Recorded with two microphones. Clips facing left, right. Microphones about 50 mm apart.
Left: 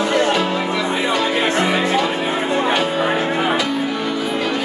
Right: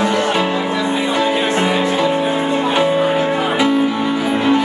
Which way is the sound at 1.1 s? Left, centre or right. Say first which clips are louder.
Right 1 dB; right.